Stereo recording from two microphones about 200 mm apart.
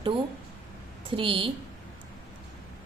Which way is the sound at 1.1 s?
25° right (ahead or behind).